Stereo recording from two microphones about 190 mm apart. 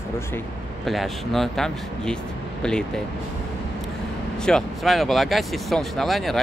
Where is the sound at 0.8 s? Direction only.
Centre (ahead or behind).